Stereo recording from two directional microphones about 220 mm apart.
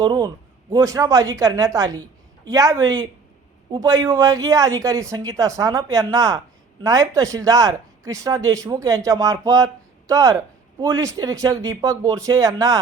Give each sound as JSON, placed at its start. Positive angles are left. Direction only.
{"t": 0.0, "sound": "a man's voice", "side_deg": -20}